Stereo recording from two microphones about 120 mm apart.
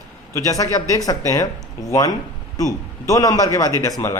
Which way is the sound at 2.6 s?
30° left (ahead or behind).